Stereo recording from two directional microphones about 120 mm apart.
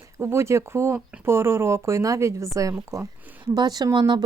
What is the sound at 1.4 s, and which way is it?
Speech, 20° right (ahead or behind).